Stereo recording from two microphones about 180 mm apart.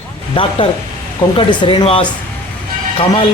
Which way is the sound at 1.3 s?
30° left (ahead or behind).